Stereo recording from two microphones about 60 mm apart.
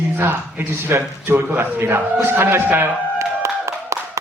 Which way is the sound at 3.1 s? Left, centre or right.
Right.